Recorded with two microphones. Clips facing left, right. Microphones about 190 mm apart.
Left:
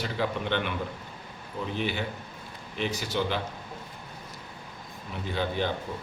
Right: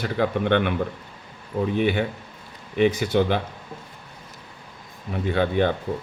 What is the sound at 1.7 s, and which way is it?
Speech, 60° right (ahead or behind).